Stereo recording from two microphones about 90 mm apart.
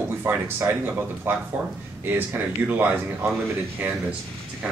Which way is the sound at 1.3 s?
25° right (ahead or behind).